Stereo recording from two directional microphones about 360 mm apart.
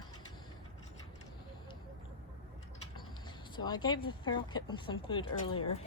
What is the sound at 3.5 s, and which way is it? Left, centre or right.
Speech, centre.